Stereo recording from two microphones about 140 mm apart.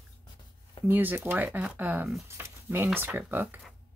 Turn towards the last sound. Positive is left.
turn(degrees=-15)  # may be behind; listen again after turning